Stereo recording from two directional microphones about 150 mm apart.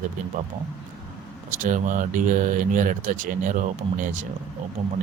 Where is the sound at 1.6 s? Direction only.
60° right (ahead or behind).